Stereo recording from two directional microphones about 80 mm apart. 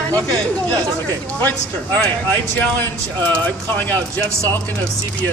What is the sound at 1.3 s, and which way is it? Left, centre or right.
Speech, left.